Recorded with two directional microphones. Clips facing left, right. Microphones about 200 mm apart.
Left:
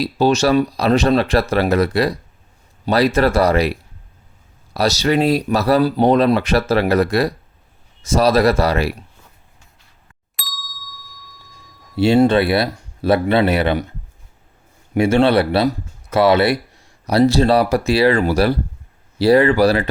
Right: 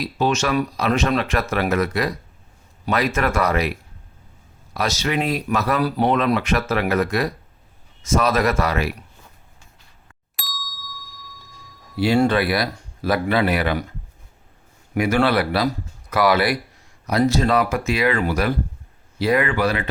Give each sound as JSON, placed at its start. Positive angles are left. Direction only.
{"t": 0.0, "sound": "speech", "side_deg": 35}
{"t": 10.3, "sound": "ding", "side_deg": 0}
{"t": 11.9, "sound": "speech", "side_deg": 25}
{"t": 14.9, "sound": "speech", "side_deg": 30}